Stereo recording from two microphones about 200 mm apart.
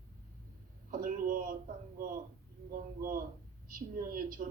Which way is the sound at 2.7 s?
45° right (ahead or behind).